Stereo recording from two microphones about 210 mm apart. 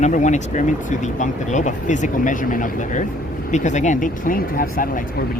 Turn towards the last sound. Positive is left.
turn(degrees=40)  # may be behind; listen again after turning